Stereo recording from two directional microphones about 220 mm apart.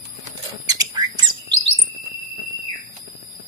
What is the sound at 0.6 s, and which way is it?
Squawk, 20° right (ahead or behind).